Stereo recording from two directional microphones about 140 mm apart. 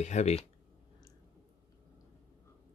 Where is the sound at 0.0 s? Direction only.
55° left (ahead or behind).